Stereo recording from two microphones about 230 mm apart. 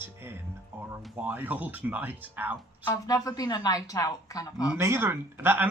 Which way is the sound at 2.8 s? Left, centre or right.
Centre.